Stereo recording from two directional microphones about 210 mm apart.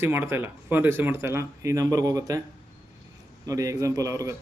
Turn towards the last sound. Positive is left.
turn(degrees=-15)  # may be behind; listen again after turning